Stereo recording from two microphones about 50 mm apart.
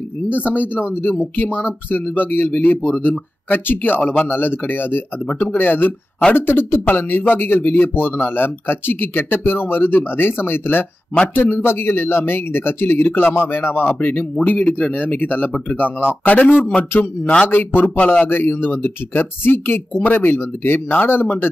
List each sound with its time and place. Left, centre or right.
0.3 s speech: left
4.0 s speech: left
4.3 s speech: left
15.0 s speech: left
16.9 s speech: left
17.9 s speech: left
18.2 s speech: left